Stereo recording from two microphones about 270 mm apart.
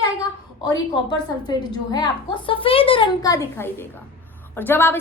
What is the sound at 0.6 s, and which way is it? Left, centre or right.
A woman's voice, centre.